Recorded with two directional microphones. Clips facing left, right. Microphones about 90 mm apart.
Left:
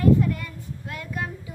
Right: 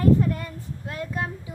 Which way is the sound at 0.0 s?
35° right (ahead or behind).